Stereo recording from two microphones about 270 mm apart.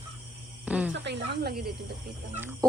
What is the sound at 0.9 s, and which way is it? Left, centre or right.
Speech, right.